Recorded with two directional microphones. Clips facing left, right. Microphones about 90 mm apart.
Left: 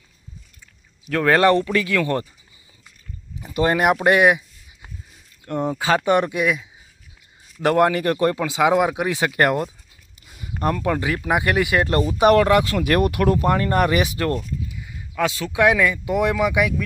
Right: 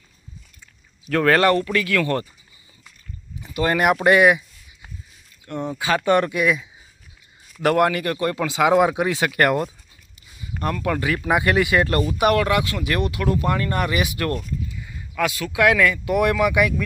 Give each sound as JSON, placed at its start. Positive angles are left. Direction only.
{"t": 1.1, "sound": "speech", "side_deg": 5}
{"t": 1.4, "sound": "speech", "side_deg": 25}
{"t": 3.6, "sound": "speech", "side_deg": 15}
{"t": 5.5, "sound": "speech", "side_deg": 40}
{"t": 6.1, "sound": "speech", "side_deg": 15}
{"t": 7.6, "sound": "speech", "side_deg": 20}
{"t": 8.4, "sound": "speech", "side_deg": 20}
{"t": 10.2, "sound": "a sound", "side_deg": 55}
{"t": 10.6, "sound": "speech", "side_deg": 25}
{"t": 11.9, "sound": "speech", "side_deg": 25}
{"t": 14.3, "sound": "speech", "side_deg": 20}